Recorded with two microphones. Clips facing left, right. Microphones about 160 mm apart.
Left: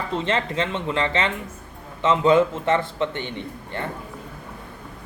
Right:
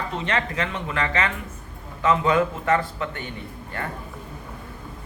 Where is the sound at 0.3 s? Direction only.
25° left (ahead or behind).